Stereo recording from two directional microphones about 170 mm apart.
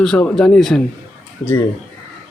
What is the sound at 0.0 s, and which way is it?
Speech, 5° left (ahead or behind).